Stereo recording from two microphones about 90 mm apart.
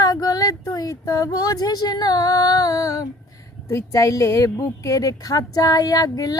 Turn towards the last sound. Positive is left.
turn(degrees=40)  # may be behind; listen again after turning